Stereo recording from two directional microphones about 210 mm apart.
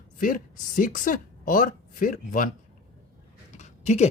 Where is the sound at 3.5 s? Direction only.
35° left (ahead or behind).